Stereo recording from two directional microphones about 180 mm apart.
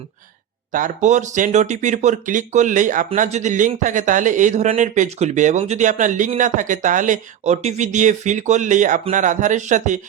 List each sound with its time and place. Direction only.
0.7 s a man's voice: 45° right (ahead or behind)